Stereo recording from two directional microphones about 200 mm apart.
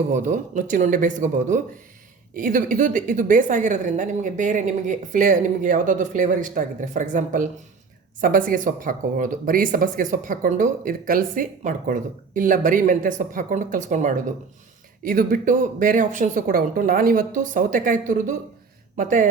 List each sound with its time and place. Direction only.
0.1 s a woman's voice: 40° right (ahead or behind)